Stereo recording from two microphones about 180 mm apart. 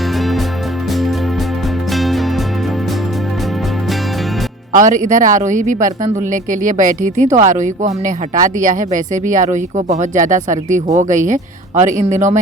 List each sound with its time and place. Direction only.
2.0 s music: centre (ahead or behind)
4.7 s speech: 50° right (ahead or behind)